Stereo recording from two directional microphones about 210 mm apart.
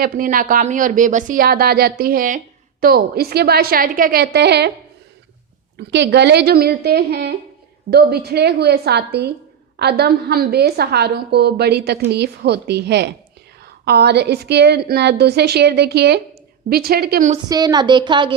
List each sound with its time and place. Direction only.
0.0 s a woman's voice: 45° right (ahead or behind)
5.7 s a woman's voice: 55° right (ahead or behind)
17.5 s a woman's voice: 20° right (ahead or behind)